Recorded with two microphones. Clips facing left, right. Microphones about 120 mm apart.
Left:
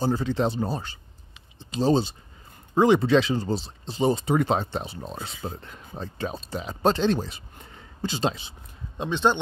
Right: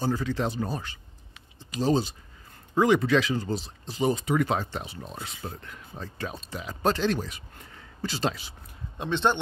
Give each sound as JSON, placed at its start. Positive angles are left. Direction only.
{"t": 0.0, "sound": "speech", "side_deg": 30}